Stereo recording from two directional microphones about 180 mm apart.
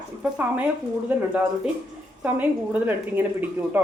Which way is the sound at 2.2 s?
10° right (ahead or behind).